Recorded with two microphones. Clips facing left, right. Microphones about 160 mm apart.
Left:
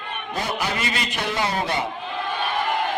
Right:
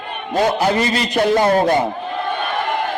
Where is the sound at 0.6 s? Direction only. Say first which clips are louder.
Right 9 dB; 40° right (ahead or behind).